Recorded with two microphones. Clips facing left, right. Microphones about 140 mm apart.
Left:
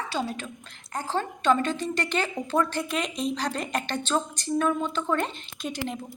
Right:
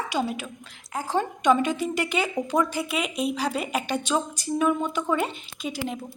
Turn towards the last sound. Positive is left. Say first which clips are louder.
# right 1 dB
turn(degrees=-5)  # may be behind; listen again after turning